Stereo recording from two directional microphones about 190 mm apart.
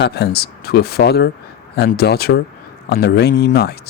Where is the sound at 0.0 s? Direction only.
60° left (ahead or behind).